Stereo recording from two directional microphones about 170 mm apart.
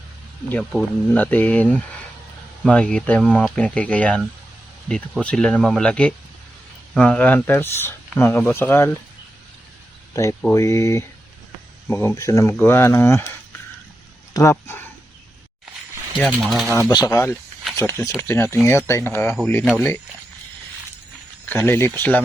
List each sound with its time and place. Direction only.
0.7 s speech: 5° left (ahead or behind)
10.5 s speech: 15° left (ahead or behind)
14.3 s speech: 15° left (ahead or behind)
16.1 s speech: centre (ahead or behind)
16.9 s speech: 25° left (ahead or behind)
21.5 s speech: 10° left (ahead or behind)